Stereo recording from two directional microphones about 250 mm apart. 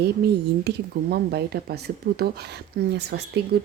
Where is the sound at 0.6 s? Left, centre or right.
Right.